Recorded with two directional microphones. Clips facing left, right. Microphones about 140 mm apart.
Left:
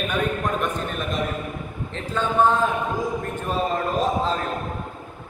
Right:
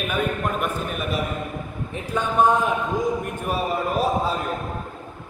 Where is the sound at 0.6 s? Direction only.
5° right (ahead or behind).